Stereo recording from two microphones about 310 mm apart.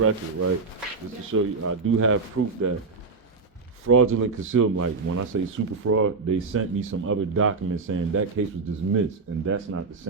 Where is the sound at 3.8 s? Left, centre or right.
Right.